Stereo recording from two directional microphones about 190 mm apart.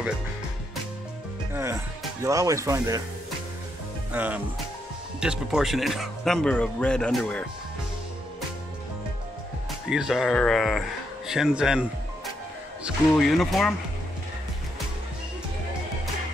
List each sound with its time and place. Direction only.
1.5 s speech: 15° right (ahead or behind)
4.1 s speech: 10° right (ahead or behind)
9.8 s speech: 5° right (ahead or behind)
12.8 s speech: centre (ahead or behind)